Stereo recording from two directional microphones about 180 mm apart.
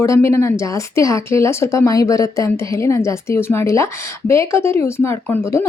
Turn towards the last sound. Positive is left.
turn(degrees=15)  # may be behind; listen again after turning